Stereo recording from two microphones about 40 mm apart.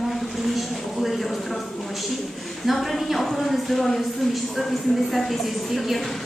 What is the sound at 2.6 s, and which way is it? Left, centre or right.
A woman's voice, centre.